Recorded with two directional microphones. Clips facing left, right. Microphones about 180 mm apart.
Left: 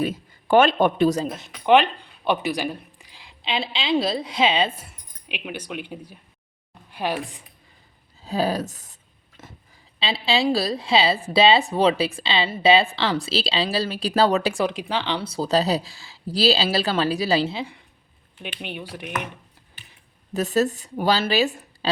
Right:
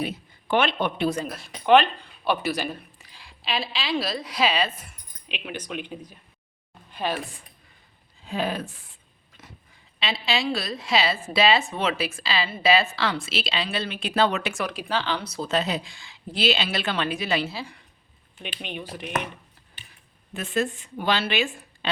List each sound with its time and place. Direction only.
0.0 s a man's voice: 45° left (ahead or behind)
1.2 s speech: 20° left (ahead or behind)
5.3 s speech: 10° left (ahead or behind)
8.2 s speech: 35° left (ahead or behind)
9.4 s a sound: 50° left (ahead or behind)
10.0 s a woman's voice: 30° left (ahead or behind)
14.7 s speech: 20° left (ahead or behind)
15.2 s a woman's voice: 30° left (ahead or behind)
18.6 s speech: 10° left (ahead or behind)
20.3 s a woman's voice: 40° left (ahead or behind)